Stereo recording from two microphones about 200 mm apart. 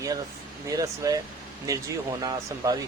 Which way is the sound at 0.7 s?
15° right (ahead or behind).